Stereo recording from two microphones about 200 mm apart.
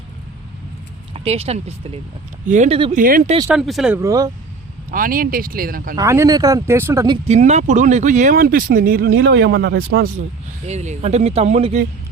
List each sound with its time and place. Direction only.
1.1 s speech: 30° right (ahead or behind)
3.5 s speech: centre (ahead or behind)
3.9 s speech: 15° right (ahead or behind)
4.9 s speech: 45° right (ahead or behind)
6.0 s speech: 15° right (ahead or behind)
7.3 s speech: 35° right (ahead or behind)
9.1 s a man's voice: 65° right (ahead or behind)
10.7 s speech: 35° right (ahead or behind)